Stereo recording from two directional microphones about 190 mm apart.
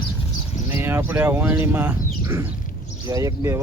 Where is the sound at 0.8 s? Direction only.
10° right (ahead or behind).